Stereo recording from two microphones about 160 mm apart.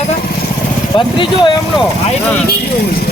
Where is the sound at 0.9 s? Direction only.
30° left (ahead or behind).